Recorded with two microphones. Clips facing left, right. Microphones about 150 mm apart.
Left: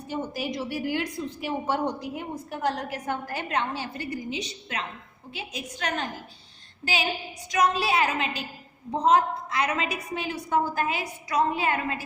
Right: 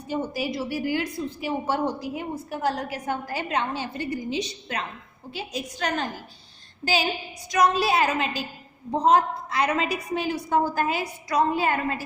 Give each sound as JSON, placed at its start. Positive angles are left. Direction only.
{"t": 0.1, "sound": "a woman's voice", "side_deg": -10}